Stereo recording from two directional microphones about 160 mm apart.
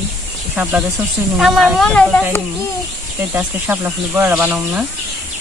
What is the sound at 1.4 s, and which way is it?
Speech, centre (ahead or behind).